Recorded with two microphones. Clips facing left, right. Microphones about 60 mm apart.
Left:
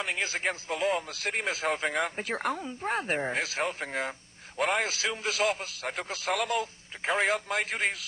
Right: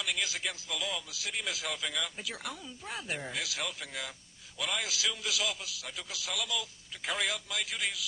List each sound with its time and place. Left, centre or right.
0.0 s speech: left